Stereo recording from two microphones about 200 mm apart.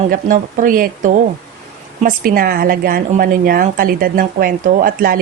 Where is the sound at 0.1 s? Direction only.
40° right (ahead or behind).